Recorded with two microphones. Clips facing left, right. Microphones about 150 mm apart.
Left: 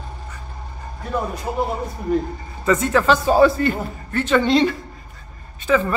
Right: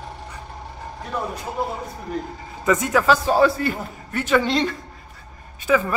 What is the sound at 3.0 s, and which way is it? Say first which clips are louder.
Speech: left 3 dB; centre (ahead or behind).